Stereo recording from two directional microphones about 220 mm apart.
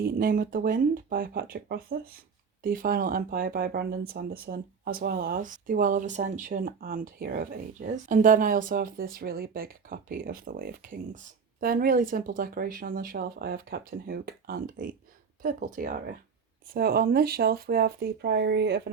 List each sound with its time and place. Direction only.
0.0 s speech: 40° right (ahead or behind)